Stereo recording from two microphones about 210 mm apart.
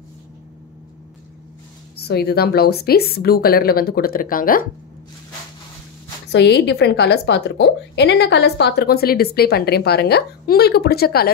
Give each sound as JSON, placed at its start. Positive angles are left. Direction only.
{"t": 2.0, "sound": "a woman's voice", "side_deg": 50}
{"t": 6.3, "sound": "a woman's voice", "side_deg": 55}